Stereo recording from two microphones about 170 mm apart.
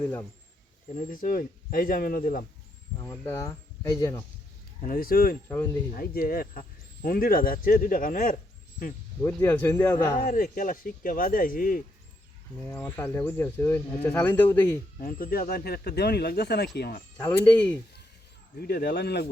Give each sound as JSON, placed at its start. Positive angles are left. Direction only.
{"t": 0.0, "sound": "speech", "side_deg": 10}
{"t": 0.9, "sound": "speech", "side_deg": 50}
{"t": 3.0, "sound": "speech", "side_deg": 15}
{"t": 4.8, "sound": "speech", "side_deg": 60}
{"t": 5.5, "sound": "speech", "side_deg": 15}
{"t": 5.9, "sound": "speech", "side_deg": 60}
{"t": 9.2, "sound": "speech", "side_deg": 15}
{"t": 10.2, "sound": "speech", "side_deg": 50}
{"t": 12.5, "sound": "speech", "side_deg": 10}
{"t": 15.0, "sound": "speech", "side_deg": 60}
{"t": 17.2, "sound": "speech", "side_deg": 10}
{"t": 18.6, "sound": "speech", "side_deg": 70}